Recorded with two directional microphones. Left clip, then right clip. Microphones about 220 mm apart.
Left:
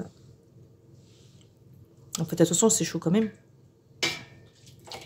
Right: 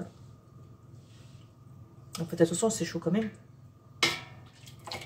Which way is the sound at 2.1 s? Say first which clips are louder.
Left 3 dB; 50° left (ahead or behind).